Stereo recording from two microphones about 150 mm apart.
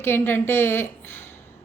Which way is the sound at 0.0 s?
15° left (ahead or behind).